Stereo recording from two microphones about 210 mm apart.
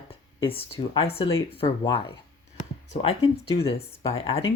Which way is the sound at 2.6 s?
30° left (ahead or behind).